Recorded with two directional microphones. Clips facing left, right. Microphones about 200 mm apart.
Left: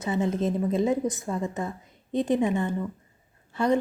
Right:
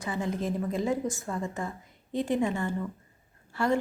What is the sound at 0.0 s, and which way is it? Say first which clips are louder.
A woman's voice: left 5 dB; 20° left (ahead or behind).